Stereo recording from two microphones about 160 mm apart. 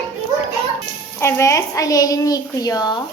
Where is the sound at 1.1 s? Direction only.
15° left (ahead or behind).